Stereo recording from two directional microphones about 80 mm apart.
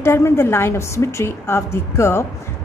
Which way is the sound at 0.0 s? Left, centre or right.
Left.